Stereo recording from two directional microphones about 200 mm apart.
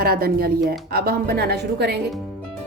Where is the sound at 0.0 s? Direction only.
50° right (ahead or behind).